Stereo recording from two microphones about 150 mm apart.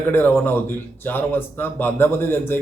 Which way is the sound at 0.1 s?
15° left (ahead or behind).